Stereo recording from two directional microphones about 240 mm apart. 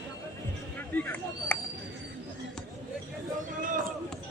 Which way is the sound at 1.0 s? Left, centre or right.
Centre.